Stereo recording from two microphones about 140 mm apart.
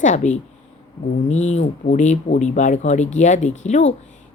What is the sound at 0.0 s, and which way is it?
Speech, 60° left (ahead or behind).